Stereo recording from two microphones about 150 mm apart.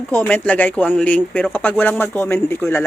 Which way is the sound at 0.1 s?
10° left (ahead or behind).